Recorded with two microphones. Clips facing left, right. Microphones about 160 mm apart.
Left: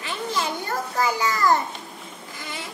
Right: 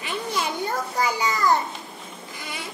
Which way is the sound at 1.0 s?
15° right (ahead or behind).